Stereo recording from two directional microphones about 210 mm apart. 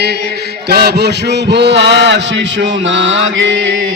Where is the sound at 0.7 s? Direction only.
50° right (ahead or behind).